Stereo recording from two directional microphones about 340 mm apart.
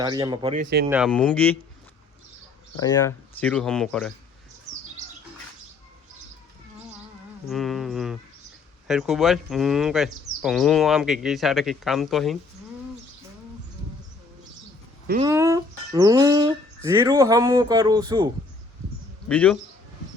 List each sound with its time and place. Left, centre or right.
0.0 s speech: centre
0.9 s speech: centre
2.8 s speech: centre
7.4 s speech: centre
15.2 s speech: centre
19.3 s speech: centre